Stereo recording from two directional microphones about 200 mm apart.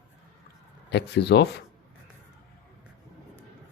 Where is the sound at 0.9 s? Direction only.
60° left (ahead or behind).